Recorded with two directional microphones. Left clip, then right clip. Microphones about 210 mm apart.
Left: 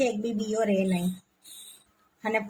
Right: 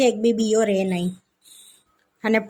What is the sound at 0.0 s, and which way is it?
Speech, 40° right (ahead or behind).